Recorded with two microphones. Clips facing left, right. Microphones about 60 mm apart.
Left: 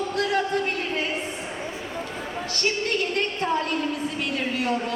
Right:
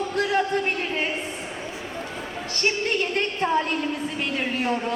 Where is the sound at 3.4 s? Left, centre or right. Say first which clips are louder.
Right 3 dB; right.